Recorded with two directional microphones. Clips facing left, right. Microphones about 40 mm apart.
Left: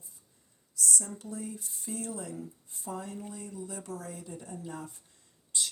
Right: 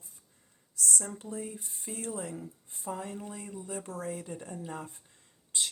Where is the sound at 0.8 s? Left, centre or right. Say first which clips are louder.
Even; right.